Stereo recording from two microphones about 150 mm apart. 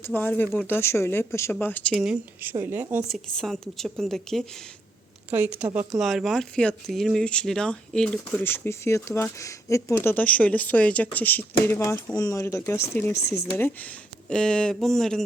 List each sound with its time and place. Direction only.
0.0 s speech: 10° left (ahead or behind)
2.4 s a woman's voice: 15° right (ahead or behind)
3.1 s a woman's voice: centre (ahead or behind)
5.3 s a woman's voice: 10° right (ahead or behind); by 13.1 s 15° left (ahead or behind)
14.3 s a woman's voice: 5° left (ahead or behind)